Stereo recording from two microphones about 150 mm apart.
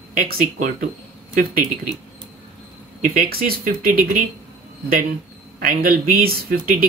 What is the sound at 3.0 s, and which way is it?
Speech, 75° right (ahead or behind).